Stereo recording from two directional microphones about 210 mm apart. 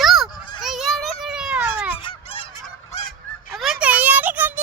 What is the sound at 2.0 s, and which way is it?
Goose, 25° left (ahead or behind).